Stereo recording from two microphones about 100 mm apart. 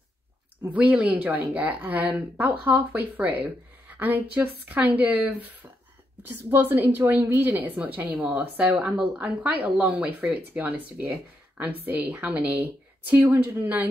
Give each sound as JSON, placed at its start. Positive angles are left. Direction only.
{"t": 0.7, "sound": "speech", "side_deg": -15}